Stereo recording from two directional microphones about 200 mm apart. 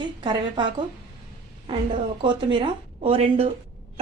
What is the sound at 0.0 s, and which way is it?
Speech, 25° right (ahead or behind).